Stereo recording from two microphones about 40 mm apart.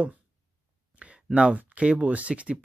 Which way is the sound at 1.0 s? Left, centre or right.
Right.